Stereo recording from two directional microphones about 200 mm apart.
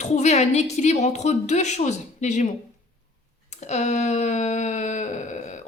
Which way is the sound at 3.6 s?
35° left (ahead or behind).